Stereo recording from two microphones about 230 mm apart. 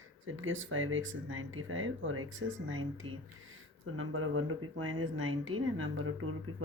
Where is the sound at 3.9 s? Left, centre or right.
Right.